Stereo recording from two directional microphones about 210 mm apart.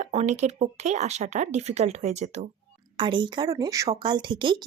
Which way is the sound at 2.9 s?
20° right (ahead or behind).